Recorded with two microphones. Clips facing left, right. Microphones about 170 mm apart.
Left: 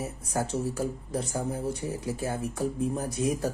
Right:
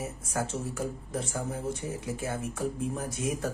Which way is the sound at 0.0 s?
35° left (ahead or behind).